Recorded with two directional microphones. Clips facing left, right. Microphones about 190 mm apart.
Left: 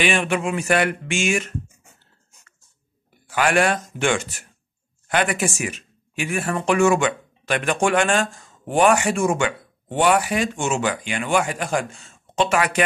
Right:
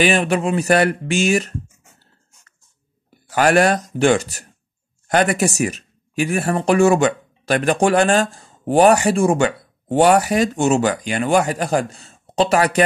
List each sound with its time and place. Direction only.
0.0 s speech: 40° right (ahead or behind)
3.3 s speech: 40° right (ahead or behind)